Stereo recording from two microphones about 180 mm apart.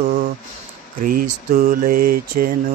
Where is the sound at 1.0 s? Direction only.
50° right (ahead or behind).